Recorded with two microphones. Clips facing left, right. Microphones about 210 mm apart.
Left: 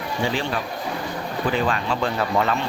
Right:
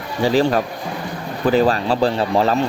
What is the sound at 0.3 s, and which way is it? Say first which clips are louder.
Speech: right 13 dB; 40° right (ahead or behind).